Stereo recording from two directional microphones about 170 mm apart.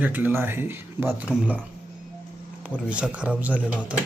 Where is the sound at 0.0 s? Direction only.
10° right (ahead or behind).